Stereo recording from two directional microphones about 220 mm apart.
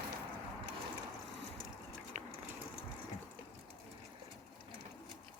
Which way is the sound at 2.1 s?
35° right (ahead or behind).